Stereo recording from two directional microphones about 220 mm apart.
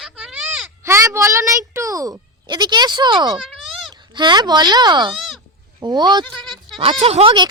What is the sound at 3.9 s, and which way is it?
Speech, 20° right (ahead or behind).